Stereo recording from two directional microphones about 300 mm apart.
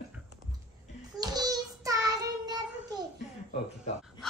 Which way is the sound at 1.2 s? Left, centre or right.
Centre.